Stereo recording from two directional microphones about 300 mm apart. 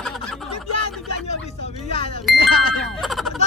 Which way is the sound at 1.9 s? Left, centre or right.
Centre.